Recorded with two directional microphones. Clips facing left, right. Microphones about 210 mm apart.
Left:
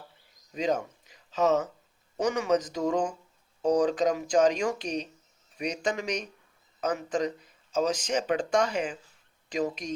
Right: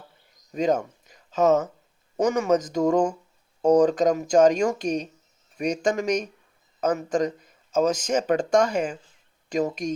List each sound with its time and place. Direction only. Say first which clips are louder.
0.5 s speech: right 5 dB; 45° right (ahead or behind)